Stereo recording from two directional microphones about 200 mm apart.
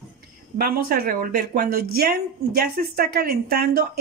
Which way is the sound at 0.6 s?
45° right (ahead or behind).